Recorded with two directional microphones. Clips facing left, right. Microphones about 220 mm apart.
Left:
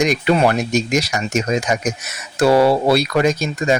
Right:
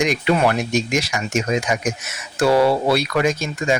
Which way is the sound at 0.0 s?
40° left (ahead or behind).